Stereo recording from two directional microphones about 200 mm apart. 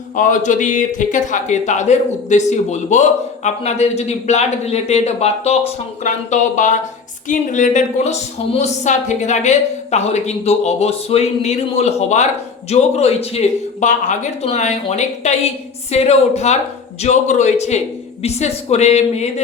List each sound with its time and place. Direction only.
0.2 s speech: 40° left (ahead or behind)